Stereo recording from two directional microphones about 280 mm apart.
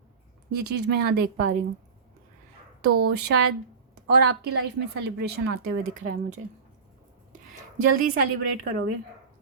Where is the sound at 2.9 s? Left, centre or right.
Right.